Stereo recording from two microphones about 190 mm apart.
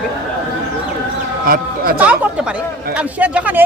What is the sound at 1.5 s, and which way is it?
Speech, 50° right (ahead or behind).